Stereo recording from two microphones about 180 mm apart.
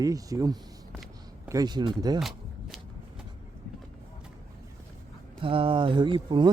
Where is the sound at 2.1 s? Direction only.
Centre (ahead or behind).